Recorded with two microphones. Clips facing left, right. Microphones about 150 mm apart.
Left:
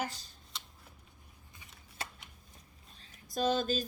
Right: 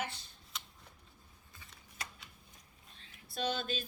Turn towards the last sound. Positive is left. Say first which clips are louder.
# left 6 dB
turn(degrees=40)  # may be behind; listen again after turning